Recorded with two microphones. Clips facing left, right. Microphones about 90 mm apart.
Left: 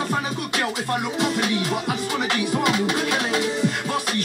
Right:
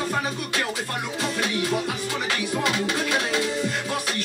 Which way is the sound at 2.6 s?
15° left (ahead or behind).